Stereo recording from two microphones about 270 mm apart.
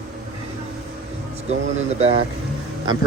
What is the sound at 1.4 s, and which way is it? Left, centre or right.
Speech, right.